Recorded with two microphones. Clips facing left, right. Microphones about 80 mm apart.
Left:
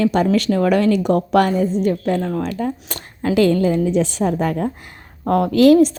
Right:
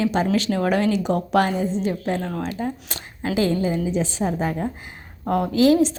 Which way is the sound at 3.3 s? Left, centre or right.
Left.